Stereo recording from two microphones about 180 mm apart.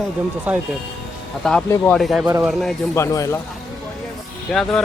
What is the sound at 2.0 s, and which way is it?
Speech, centre (ahead or behind).